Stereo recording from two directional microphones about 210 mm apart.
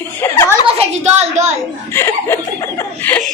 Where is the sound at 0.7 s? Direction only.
30° right (ahead or behind).